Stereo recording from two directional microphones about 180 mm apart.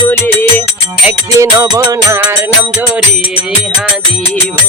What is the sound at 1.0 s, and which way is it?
Music, 15° right (ahead or behind).